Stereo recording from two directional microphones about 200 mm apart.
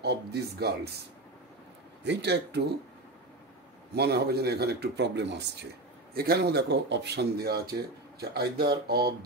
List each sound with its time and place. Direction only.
0.0 s speech: 55° right (ahead or behind)
2.0 s speech: 55° right (ahead or behind)
3.9 s speech: 55° right (ahead or behind)